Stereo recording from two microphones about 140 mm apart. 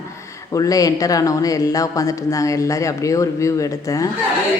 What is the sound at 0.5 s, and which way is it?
Speech, 25° left (ahead or behind).